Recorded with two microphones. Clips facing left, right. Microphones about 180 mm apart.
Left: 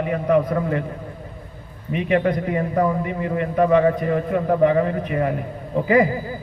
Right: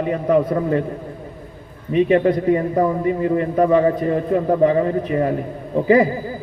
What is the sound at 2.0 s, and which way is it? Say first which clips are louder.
A man's voice: right 2 dB; 30° right (ahead or behind).